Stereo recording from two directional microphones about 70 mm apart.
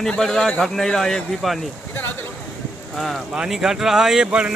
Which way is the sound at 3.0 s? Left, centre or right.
Centre.